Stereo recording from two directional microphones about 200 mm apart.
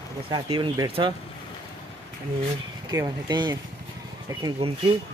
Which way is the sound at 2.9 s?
20° right (ahead or behind).